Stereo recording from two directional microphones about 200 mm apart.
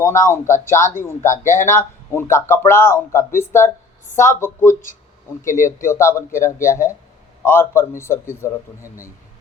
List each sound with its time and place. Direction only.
0.0 s speech: 15° left (ahead or behind)
5.4 s speech: 40° left (ahead or behind)
5.6 s speech: 15° left (ahead or behind)